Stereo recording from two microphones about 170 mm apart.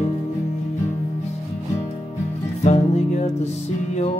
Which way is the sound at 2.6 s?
40° left (ahead or behind).